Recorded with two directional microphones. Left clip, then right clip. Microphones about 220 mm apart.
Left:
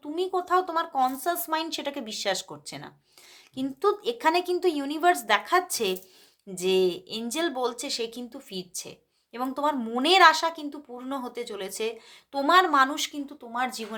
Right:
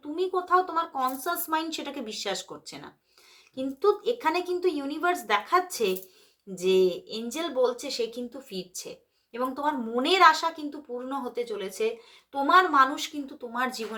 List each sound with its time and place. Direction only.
0.2 s a woman's voice: 40° left (ahead or behind)
13.5 s speech: 30° left (ahead or behind)